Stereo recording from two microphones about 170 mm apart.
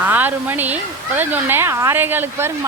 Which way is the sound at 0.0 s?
10° right (ahead or behind).